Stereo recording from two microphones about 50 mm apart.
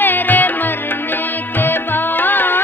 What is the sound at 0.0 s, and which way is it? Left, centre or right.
Music, left.